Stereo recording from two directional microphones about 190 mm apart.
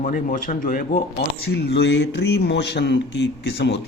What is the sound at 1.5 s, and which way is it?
A man's voice, 60° left (ahead or behind).